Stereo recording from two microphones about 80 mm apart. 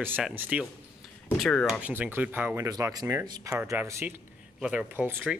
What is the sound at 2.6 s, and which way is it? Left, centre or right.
Speech, right.